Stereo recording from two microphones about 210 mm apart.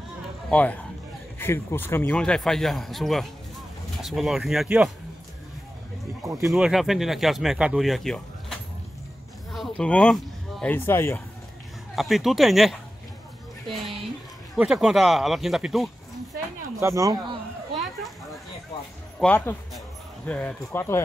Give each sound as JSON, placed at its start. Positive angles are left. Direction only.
{"t": 0.5, "sound": "speech", "side_deg": 5}
{"t": 6.2, "sound": "speech", "side_deg": -15}
{"t": 6.5, "sound": "speech", "side_deg": 0}
{"t": 11.9, "sound": "speech", "side_deg": 0}
{"t": 16.8, "sound": "speech", "side_deg": -15}
{"t": 19.1, "sound": "speech", "side_deg": 10}